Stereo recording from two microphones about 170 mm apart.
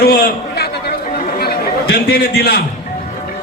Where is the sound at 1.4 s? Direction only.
65° left (ahead or behind).